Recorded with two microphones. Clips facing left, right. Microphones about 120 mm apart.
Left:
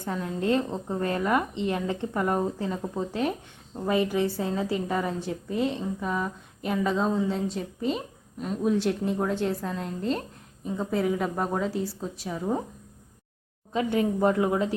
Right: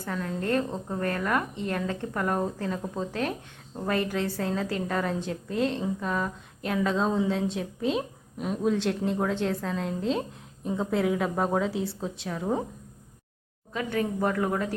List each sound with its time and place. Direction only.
0.0 s a woman's voice: 20° left (ahead or behind); by 8.7 s centre (ahead or behind)
8.7 s a woman's voice: 10° left (ahead or behind)
13.7 s speech: 25° left (ahead or behind)